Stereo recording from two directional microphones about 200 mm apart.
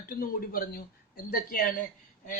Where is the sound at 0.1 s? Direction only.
45° left (ahead or behind).